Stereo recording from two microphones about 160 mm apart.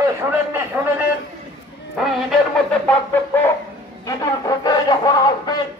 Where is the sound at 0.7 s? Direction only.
15° right (ahead or behind).